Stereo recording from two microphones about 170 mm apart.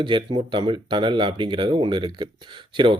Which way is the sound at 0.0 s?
30° right (ahead or behind).